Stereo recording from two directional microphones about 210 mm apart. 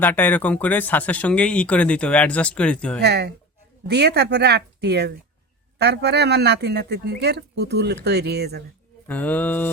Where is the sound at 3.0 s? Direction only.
50° right (ahead or behind).